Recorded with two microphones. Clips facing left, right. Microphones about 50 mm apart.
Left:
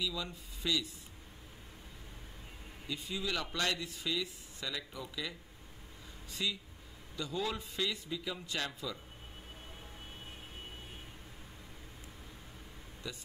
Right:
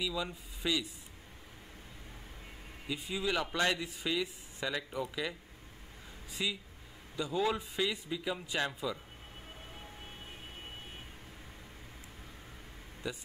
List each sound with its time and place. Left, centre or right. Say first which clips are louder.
0.0 s a man's voice: right 3 dB; centre
2.9 s speech: right 3 dB; centre
6.4 s a man's voice: right 1 dB; centre
13.0 s a man's voice: right 5 dB; centre